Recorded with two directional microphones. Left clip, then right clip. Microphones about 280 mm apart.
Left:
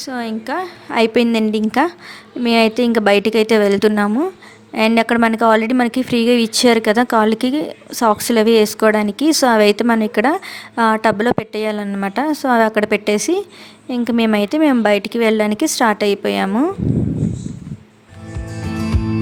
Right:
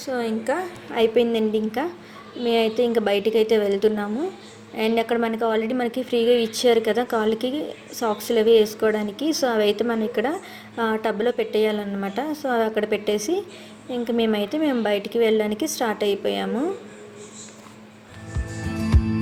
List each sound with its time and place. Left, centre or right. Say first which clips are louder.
0.0 s a woman's voice: left 1 dB; left
18.6 s music: left 4 dB; centre